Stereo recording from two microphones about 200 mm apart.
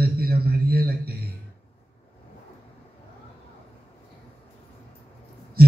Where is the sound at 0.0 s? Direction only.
50° right (ahead or behind).